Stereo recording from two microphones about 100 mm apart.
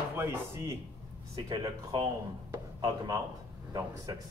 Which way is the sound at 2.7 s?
45° right (ahead or behind).